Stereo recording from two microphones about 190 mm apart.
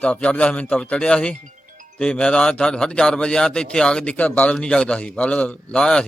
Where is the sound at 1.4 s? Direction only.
40° right (ahead or behind).